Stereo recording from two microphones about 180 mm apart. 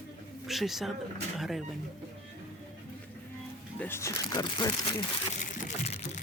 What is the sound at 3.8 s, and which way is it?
Speech, 15° left (ahead or behind).